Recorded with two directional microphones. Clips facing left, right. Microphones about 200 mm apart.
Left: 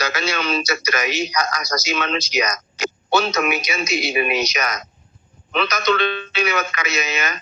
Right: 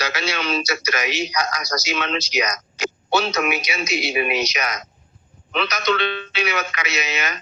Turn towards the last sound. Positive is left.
turn(degrees=50)  # may be behind; listen again after turning